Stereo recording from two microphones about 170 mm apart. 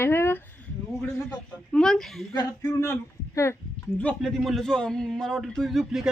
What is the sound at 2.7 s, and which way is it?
Speech, 15° left (ahead or behind).